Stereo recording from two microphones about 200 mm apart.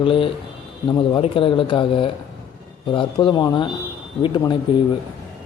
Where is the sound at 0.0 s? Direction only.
25° left (ahead or behind).